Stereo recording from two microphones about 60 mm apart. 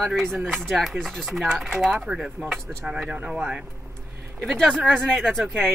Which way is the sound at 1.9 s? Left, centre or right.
Centre.